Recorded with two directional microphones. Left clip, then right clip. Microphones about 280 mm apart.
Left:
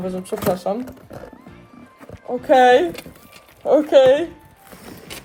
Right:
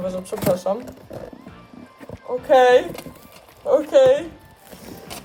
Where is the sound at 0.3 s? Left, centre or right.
Centre.